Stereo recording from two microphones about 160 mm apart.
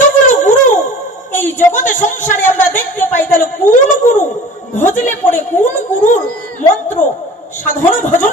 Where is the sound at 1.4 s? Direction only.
55° left (ahead or behind).